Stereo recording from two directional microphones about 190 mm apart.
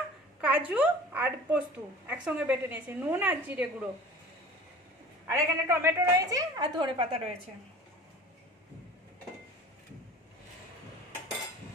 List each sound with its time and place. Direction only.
0.4 s a woman's voice: 5° right (ahead or behind)
5.2 s a woman's voice: 15° right (ahead or behind)